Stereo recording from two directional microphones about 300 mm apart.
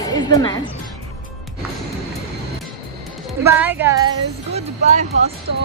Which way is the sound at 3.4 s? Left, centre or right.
Centre.